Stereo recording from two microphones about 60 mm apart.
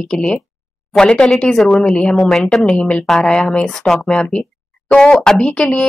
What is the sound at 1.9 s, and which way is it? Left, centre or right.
Speech, centre.